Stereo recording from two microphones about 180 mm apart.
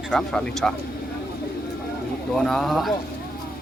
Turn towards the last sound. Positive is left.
turn(degrees=0)  # may be behind; listen again after turning